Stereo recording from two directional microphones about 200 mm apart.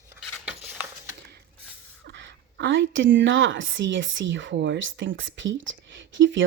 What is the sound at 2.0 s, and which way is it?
A woman's voice, 60° right (ahead or behind).